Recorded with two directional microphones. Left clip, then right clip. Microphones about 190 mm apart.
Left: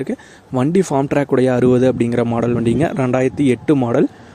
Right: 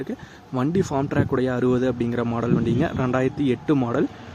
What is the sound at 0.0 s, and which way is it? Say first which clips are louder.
Speech: left 7 dB; 30° left (ahead or behind).